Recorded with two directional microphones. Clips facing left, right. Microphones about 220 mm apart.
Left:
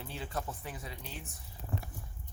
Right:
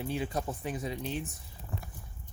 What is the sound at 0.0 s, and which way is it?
Speech, 15° right (ahead or behind).